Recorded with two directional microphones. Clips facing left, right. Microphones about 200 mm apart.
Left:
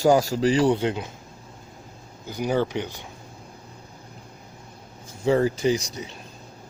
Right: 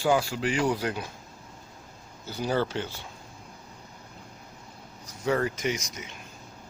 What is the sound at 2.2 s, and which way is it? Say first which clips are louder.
Speech: left 4 dB; 15° left (ahead or behind).